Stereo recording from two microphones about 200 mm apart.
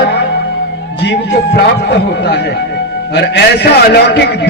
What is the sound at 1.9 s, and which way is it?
A man's voice, 60° left (ahead or behind).